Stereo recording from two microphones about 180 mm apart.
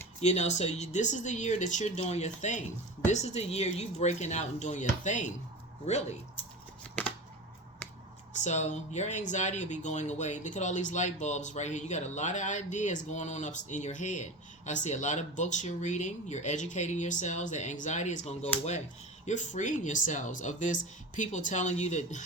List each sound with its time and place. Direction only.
0.2 s speech: 40° left (ahead or behind)
8.4 s speech: 40° left (ahead or behind)